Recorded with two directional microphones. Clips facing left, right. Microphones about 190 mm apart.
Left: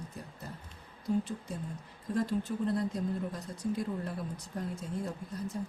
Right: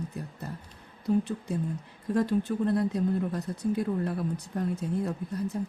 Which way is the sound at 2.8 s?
65° right (ahead or behind).